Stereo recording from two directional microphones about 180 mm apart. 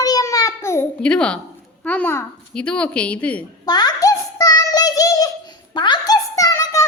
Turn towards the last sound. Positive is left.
turn(degrees=15)  # may be behind; listen again after turning